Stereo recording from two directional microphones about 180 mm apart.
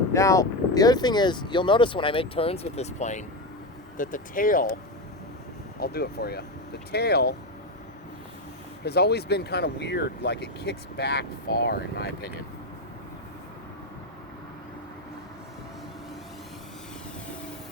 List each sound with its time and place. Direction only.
0.1 s speech: 15° left (ahead or behind); by 4.8 s 50° left (ahead or behind)
5.8 s speech: 60° left (ahead or behind)
8.8 s speech: 65° left (ahead or behind)